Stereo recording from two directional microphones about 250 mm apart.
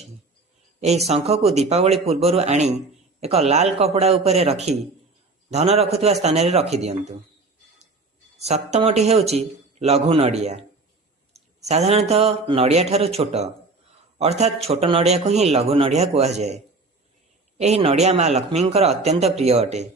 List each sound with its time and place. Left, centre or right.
0.8 s a man's voice: right
8.4 s a man's voice: right
17.6 s a man's voice: right